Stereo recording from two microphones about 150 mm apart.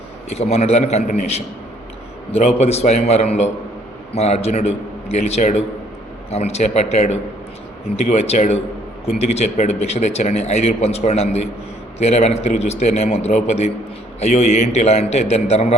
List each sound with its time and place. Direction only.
0.3 s speech: 45° left (ahead or behind)
2.6 s speech: 45° left (ahead or behind)